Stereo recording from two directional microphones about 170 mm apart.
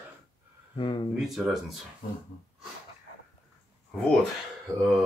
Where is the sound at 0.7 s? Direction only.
30° left (ahead or behind).